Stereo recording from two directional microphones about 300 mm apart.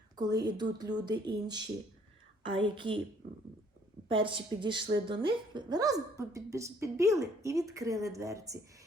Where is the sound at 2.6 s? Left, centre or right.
Centre.